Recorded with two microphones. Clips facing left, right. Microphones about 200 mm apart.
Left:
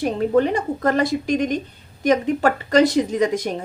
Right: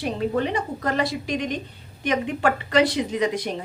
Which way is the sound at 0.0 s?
45° left (ahead or behind).